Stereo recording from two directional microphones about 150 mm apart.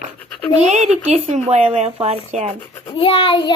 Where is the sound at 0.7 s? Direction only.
45° right (ahead or behind).